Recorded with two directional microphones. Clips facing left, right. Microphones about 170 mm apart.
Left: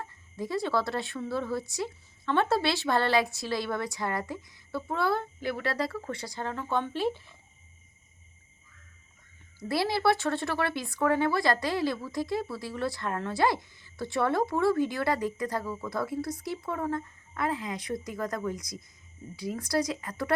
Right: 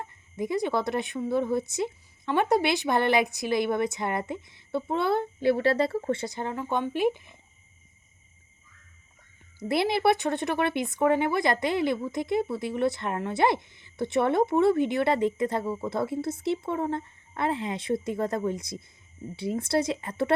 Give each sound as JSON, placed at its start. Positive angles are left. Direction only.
{"t": 0.0, "sound": "speech", "side_deg": -20}
{"t": 9.6, "sound": "speech", "side_deg": -20}